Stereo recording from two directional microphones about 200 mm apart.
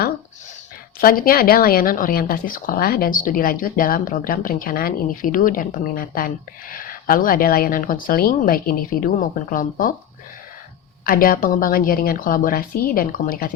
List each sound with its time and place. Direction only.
0.9 s speech: 45° left (ahead or behind)
11.0 s speech: 45° left (ahead or behind)